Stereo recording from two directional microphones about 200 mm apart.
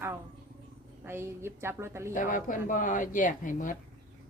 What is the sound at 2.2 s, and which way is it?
Speech, 40° left (ahead or behind).